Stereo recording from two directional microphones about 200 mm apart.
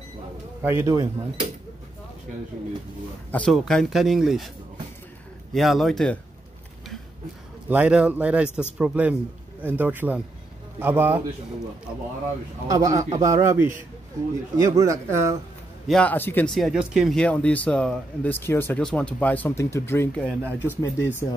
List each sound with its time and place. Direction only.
0.6 s a man's voice: 10° right (ahead or behind)
3.3 s speech: 5° left (ahead or behind)
5.5 s speech: centre (ahead or behind)
7.7 s a man's voice: 5° right (ahead or behind)
12.6 s a man's voice: 15° right (ahead or behind)
15.9 s speech: 5° left (ahead or behind)